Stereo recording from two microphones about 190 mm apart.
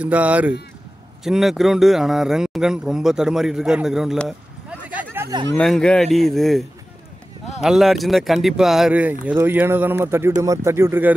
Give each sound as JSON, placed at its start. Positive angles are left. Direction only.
{"t": 0.0, "sound": "speech", "side_deg": -5}
{"t": 5.6, "sound": "speech", "side_deg": 5}
{"t": 7.6, "sound": "speech", "side_deg": 0}